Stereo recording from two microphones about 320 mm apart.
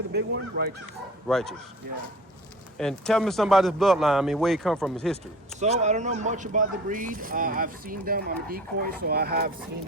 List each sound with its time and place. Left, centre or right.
0.1 s speech: right
1.3 s a man's voice: centre
2.7 s a man's voice: centre
5.5 s speech: right